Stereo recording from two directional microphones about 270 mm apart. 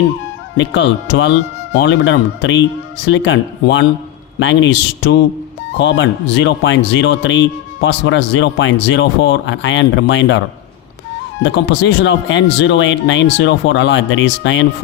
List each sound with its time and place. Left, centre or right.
0.5 s speech: left
11.4 s speech: left